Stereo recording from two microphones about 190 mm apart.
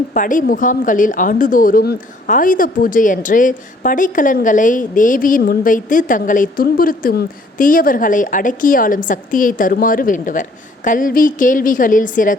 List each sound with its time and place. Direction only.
0.1 s speech: 45° left (ahead or behind)